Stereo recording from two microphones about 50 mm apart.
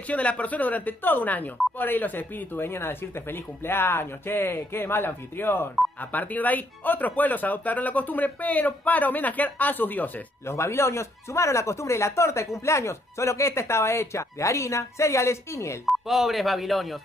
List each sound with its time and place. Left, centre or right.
0.1 s speech: left
5.9 s speech: left
10.4 s speech: left
15.9 s speech: centre